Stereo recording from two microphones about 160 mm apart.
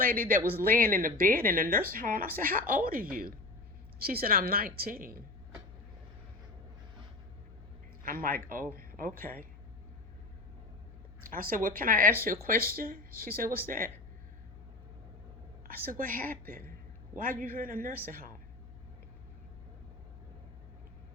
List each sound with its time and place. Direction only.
0.0 s a woman's voice: 65° right (ahead or behind)
8.0 s speech: 60° right (ahead or behind)
11.2 s speech: 60° right (ahead or behind)
15.6 s speech: 65° right (ahead or behind)